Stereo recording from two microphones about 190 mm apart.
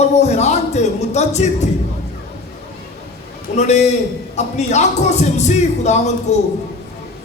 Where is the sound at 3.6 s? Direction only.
35° left (ahead or behind).